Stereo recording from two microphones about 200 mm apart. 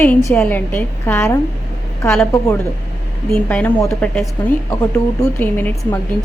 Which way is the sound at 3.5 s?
10° left (ahead or behind).